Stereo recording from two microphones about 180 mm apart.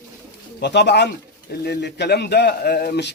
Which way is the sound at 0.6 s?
70° left (ahead or behind).